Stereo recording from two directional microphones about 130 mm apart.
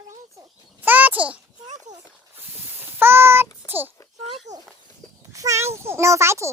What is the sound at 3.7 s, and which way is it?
Speech, 15° right (ahead or behind).